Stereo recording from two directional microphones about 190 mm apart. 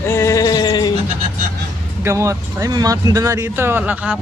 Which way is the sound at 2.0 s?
15° right (ahead or behind).